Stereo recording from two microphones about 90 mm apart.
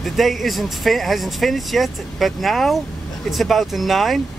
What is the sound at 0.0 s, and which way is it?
Speech, centre (ahead or behind).